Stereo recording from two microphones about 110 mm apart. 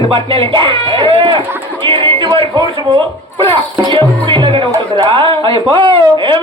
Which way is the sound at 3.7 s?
50° right (ahead or behind).